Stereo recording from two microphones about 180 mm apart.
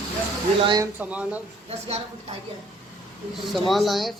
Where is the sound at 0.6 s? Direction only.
25° right (ahead or behind).